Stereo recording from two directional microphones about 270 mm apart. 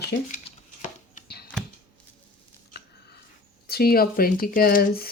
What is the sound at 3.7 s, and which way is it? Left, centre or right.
Speech, left.